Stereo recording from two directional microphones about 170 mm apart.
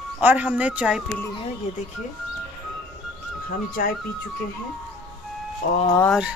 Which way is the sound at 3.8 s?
55° left (ahead or behind).